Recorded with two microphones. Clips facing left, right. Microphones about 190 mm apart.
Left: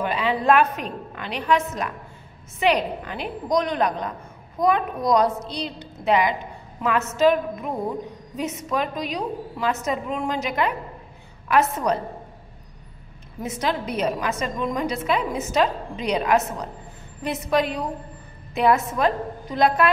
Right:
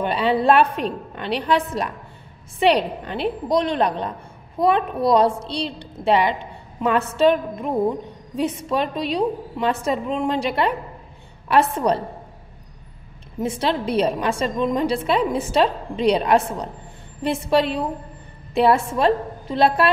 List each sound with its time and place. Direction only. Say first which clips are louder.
0.0 s a woman's voice: right 4 dB; 35° right (ahead or behind)
8.4 s a woman's voice: right 4 dB; 30° right (ahead or behind)
13.4 s a woman's voice: right 4 dB; 30° right (ahead or behind)